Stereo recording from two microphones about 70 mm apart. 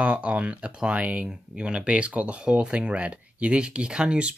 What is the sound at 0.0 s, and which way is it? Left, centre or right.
Speech, centre.